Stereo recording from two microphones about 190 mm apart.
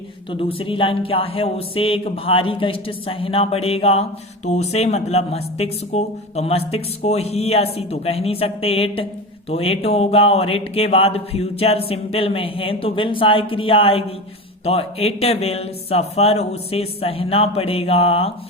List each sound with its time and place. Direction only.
0.3 s speech: 30° left (ahead or behind)